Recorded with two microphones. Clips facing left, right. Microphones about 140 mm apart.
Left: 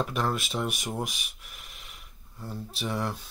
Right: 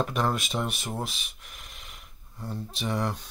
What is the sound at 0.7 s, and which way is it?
Speech, 15° left (ahead or behind).